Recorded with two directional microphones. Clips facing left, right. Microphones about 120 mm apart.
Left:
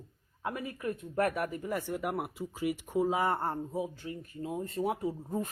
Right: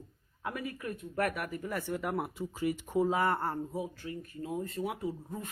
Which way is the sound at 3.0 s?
20° left (ahead or behind).